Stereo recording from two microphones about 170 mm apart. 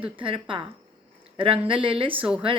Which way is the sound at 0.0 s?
30° right (ahead or behind).